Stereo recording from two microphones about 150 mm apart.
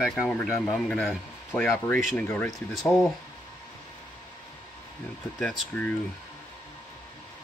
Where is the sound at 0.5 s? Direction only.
15° left (ahead or behind).